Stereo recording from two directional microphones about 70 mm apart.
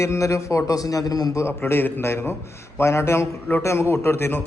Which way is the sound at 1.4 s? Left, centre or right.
Left.